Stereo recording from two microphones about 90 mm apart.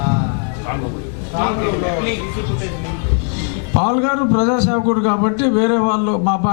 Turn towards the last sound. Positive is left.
turn(degrees=20)  # may be behind; listen again after turning